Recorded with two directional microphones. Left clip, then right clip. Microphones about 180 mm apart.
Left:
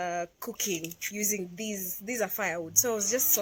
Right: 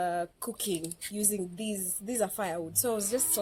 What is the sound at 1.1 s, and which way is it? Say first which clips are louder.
A woman's voice: even; 10° right (ahead or behind).